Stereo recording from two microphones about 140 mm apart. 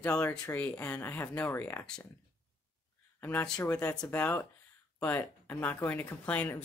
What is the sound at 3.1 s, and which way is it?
Speech, 15° left (ahead or behind).